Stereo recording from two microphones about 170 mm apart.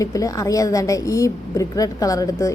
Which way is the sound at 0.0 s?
20° left (ahead or behind).